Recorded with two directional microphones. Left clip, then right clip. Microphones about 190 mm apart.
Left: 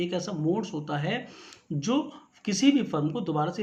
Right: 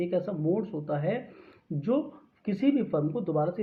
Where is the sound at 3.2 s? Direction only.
40° left (ahead or behind).